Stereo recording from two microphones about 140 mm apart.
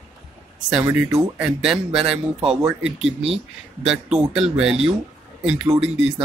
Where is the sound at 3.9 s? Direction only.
5° right (ahead or behind).